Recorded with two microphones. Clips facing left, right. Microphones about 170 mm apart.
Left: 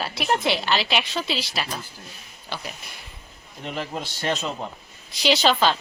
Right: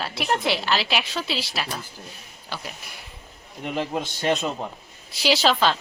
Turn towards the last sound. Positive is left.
turn(degrees=0)  # may be behind; listen again after turning